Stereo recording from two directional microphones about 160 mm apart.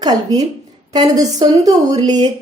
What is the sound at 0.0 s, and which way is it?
A woman's voice, 25° right (ahead or behind).